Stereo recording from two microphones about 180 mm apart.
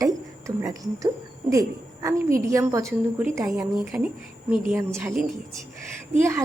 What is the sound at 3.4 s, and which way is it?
Speech, 5° right (ahead or behind).